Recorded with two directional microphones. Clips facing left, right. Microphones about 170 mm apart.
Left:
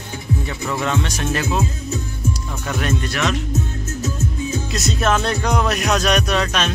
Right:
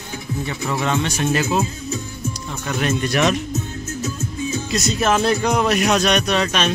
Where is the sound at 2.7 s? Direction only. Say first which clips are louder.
Right 1 dB; 5° right (ahead or behind).